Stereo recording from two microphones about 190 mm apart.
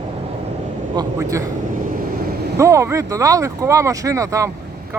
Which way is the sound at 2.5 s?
15° right (ahead or behind).